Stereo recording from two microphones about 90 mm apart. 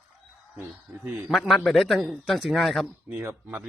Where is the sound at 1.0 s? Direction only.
20° right (ahead or behind).